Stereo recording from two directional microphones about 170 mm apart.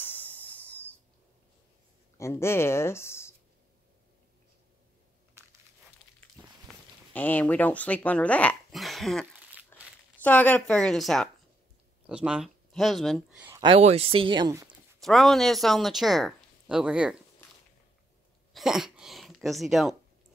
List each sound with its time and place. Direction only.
0.0 s snort: 10° left (ahead or behind)
2.1 s speech: 15° left (ahead or behind)
6.4 s walk: 20° right (ahead or behind)
7.2 s speech: 10° left (ahead or behind); by 9.7 s 5° right (ahead or behind)
10.1 s speech: 10° left (ahead or behind)
13.7 s speech: 40° right (ahead or behind)
15.0 s speech: centre (ahead or behind)
18.5 s a sound: centre (ahead or behind)